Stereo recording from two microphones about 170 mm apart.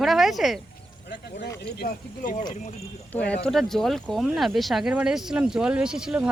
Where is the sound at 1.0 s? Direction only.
80° left.